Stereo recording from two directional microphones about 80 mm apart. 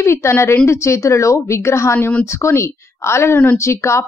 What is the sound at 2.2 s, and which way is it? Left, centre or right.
Speech, left.